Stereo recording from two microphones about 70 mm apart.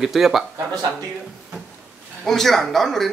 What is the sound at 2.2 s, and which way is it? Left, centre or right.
Speech, centre.